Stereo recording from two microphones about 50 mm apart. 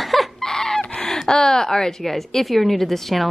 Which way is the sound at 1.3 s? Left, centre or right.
Centre.